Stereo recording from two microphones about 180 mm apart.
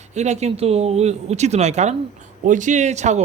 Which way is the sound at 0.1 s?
40° right (ahead or behind).